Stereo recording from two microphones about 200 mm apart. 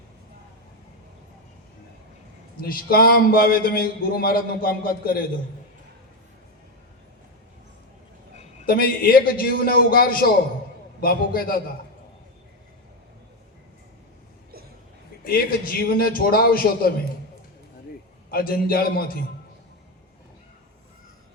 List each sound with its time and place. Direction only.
2.6 s a man's voice: 45° left (ahead or behind)
8.6 s a man's voice: 45° left (ahead or behind)
15.2 s a man's voice: 45° left (ahead or behind)
18.3 s a man's voice: 50° left (ahead or behind)